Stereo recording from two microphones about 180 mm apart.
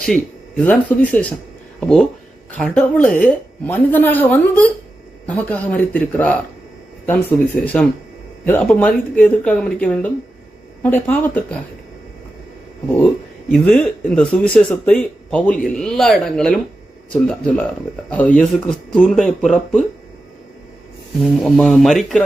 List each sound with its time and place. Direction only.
0.0 s speech: 5° left (ahead or behind)
2.6 s speech: 5° left (ahead or behind)
13.5 s speech: 5° left (ahead or behind)
21.4 s speech: centre (ahead or behind)